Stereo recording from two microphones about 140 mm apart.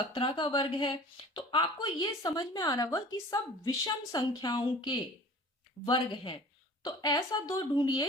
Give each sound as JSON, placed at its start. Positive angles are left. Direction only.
{"t": 0.1, "sound": "a woman's voice", "side_deg": 35}